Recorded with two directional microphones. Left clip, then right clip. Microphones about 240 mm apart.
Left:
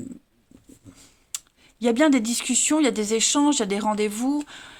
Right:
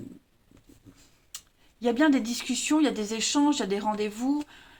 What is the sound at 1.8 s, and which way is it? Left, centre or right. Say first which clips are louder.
Speech: left 4 dB; left.